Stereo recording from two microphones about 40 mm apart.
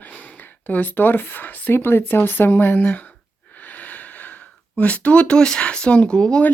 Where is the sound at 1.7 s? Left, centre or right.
Left.